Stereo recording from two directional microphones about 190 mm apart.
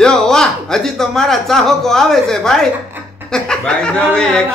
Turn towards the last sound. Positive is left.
turn(degrees=5)  # may be behind; listen again after turning